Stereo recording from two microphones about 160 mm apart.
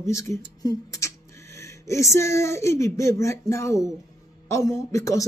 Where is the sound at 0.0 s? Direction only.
20° left (ahead or behind).